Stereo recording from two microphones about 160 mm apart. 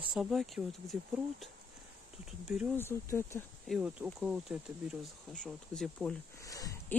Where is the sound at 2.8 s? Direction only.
15° left (ahead or behind).